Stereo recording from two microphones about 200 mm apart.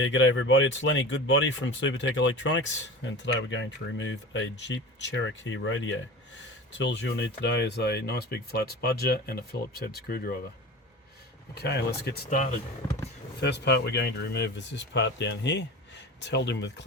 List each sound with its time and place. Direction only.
0.0 s speech: 70° left (ahead or behind); by 10.3 s 50° left (ahead or behind)
11.5 s speech: 55° left (ahead or behind)
13.4 s speech: 60° left (ahead or behind)